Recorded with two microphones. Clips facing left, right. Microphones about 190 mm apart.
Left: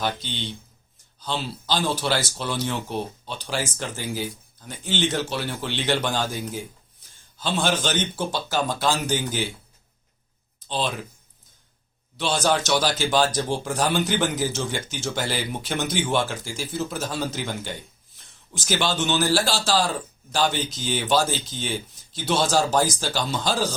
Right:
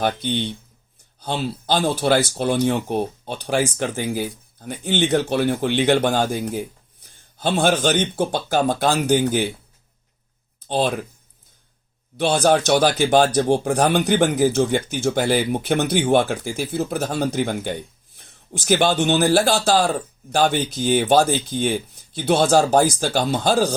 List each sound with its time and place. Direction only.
0.0 s speech: 55° right (ahead or behind)
10.6 s speech: 55° right (ahead or behind)
12.1 s speech: 55° right (ahead or behind)